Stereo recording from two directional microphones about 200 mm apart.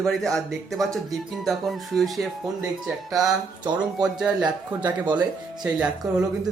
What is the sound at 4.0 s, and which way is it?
Speech, 5° right (ahead or behind).